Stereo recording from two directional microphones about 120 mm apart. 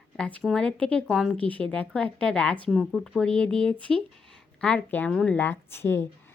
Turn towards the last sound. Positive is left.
turn(degrees=20)  # may be behind; listen again after turning